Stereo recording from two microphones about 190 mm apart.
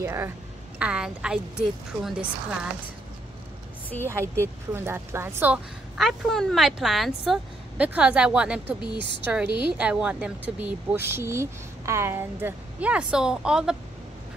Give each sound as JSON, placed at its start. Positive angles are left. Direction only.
{"t": 0.0, "sound": "a woman's voice", "side_deg": -15}
{"t": 4.1, "sound": "a woman's voice", "side_deg": -15}